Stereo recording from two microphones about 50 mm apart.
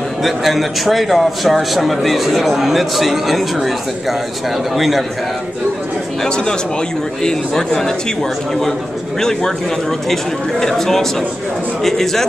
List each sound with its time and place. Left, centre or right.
0.2 s a man's voice: centre
4.7 s a man's voice: centre
6.2 s a man's voice: centre
10.6 s a man's voice: centre